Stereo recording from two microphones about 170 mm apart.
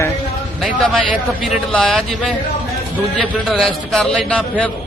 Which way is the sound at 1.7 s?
5° left (ahead or behind).